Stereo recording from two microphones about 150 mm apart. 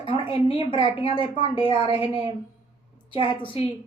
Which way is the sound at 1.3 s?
35° right (ahead or behind).